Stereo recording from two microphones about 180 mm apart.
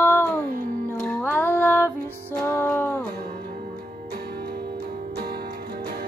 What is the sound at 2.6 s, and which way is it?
Music, 10° left (ahead or behind).